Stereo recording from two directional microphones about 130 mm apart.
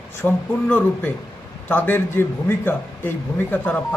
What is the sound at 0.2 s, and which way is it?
Speech, 15° left (ahead or behind).